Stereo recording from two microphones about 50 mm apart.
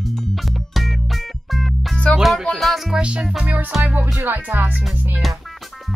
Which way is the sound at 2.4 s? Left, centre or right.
Centre.